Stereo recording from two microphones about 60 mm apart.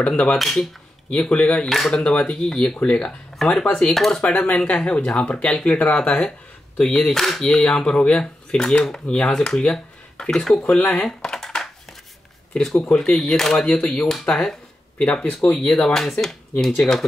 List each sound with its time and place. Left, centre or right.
0.1 s speech: centre
1.1 s speech: centre
2.0 s speech: centre
4.2 s speech: left; by 10.8 s centre
11.1 s computer keyboard: centre
12.5 s speech: centre
13.7 s speech: centre